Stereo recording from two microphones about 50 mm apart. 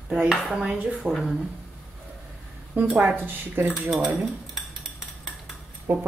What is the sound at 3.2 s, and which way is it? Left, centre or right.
Speech, right.